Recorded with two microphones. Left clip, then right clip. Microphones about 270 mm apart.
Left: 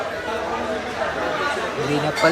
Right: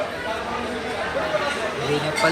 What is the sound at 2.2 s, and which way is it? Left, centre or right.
Speech, left.